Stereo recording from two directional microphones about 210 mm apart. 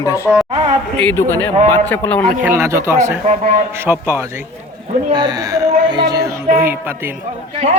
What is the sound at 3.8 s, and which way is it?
Speech, 10° right (ahead or behind).